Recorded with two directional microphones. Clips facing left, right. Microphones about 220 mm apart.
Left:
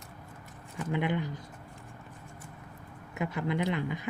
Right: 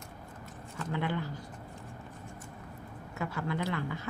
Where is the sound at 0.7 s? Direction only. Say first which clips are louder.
Left 3 dB; 15° left (ahead or behind).